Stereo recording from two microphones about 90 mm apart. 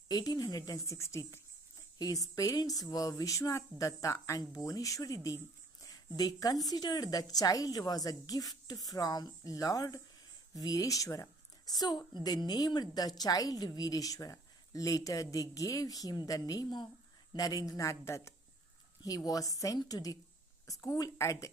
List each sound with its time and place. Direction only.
0.1 s speech: 50° left (ahead or behind); by 1.4 s 30° left (ahead or behind)
2.0 s a woman's voice: 45° left (ahead or behind)
19.0 s speech: 40° left (ahead or behind)